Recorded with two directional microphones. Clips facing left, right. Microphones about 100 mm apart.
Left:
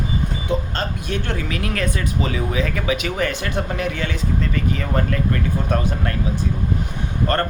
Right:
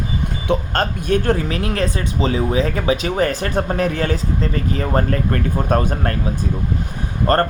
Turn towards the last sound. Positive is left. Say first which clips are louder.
# right 4 dB
turn(degrees=-40)  # may be behind; listen again after turning